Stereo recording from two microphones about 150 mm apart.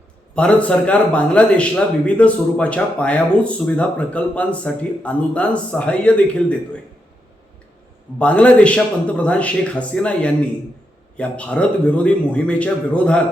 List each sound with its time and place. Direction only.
0.3 s a man's voice: 5° left (ahead or behind)
8.2 s a man's voice: 10° left (ahead or behind)